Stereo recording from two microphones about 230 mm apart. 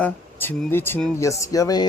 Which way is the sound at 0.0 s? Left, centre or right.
Centre.